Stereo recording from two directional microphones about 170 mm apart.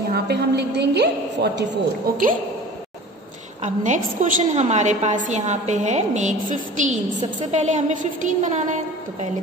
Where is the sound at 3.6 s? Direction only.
45° right (ahead or behind).